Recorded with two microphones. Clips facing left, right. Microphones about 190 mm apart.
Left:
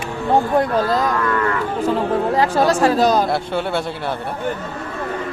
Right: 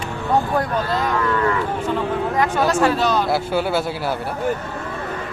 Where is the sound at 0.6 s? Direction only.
35° left (ahead or behind).